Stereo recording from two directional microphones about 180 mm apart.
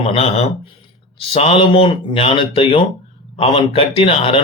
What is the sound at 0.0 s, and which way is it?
Speech, 35° left (ahead or behind).